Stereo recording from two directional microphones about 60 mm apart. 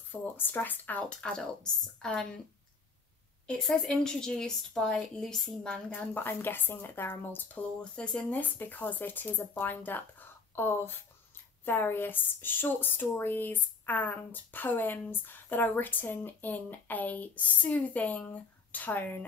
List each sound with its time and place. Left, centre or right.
0.1 s a woman's voice: left
1.2 s a woman's voice: centre
3.4 s a woman's voice: centre
5.9 s a woman's voice: left
6.2 s a woman's voice: left
7.8 s a woman's voice: centre
8.3 s a woman's voice: left